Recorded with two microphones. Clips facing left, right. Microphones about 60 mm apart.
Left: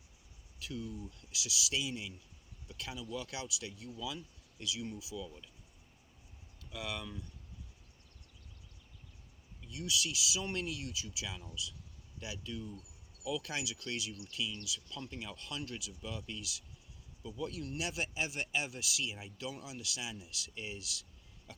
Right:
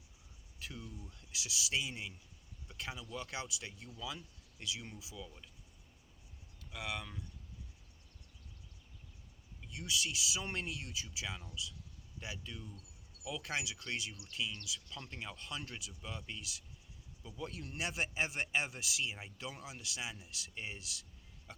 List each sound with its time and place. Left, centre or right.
0.6 s speech: right
6.7 s speech: right
9.6 s speech: right